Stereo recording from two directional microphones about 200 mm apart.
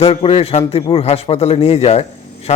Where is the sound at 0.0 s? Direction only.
30° left (ahead or behind).